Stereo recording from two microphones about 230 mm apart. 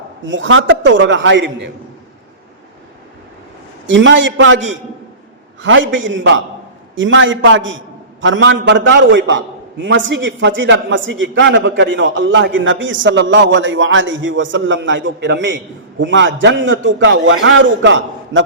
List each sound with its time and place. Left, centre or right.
0.3 s a man's voice: right
3.8 s a man's voice: right
5.6 s a man's voice: right